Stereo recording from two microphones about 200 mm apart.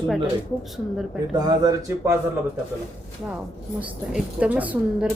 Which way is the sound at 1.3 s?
20° right (ahead or behind).